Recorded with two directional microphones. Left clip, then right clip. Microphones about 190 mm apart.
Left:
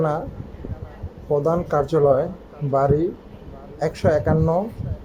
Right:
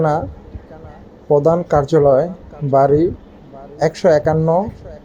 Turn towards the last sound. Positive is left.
turn(degrees=-15)  # may be behind; listen again after turning